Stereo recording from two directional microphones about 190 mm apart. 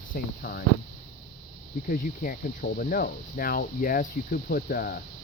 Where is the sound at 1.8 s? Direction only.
45° left (ahead or behind).